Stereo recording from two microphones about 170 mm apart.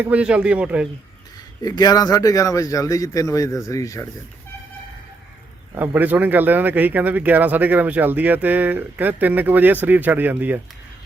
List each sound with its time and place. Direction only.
0.0 s speech: 5° right (ahead or behind)
1.6 s speech: 25° left (ahead or behind)
5.7 s speech: 10° right (ahead or behind)